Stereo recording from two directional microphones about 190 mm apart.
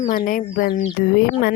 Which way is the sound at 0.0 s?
45° left (ahead or behind).